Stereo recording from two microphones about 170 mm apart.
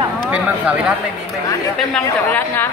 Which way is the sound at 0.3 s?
5° right (ahead or behind).